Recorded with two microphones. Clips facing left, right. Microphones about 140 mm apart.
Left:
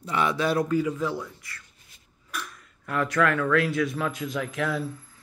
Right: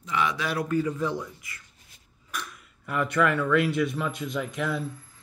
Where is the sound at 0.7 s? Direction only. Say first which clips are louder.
Left 1 dB; 10° left (ahead or behind).